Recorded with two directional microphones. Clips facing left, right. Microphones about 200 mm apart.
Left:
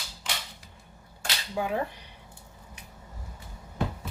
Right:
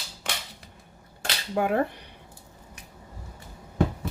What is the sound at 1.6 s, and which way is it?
Speech, 60° right (ahead or behind).